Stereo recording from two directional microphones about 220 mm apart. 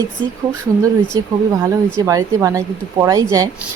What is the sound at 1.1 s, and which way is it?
Speech, 15° right (ahead or behind).